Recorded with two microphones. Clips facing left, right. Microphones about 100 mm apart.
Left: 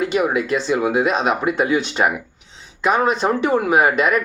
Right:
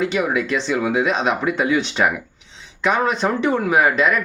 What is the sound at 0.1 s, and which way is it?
Speech, 45° left (ahead or behind).